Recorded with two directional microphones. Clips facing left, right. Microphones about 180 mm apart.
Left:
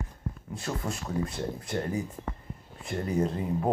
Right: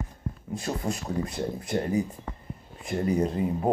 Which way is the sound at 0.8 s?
15° right (ahead or behind).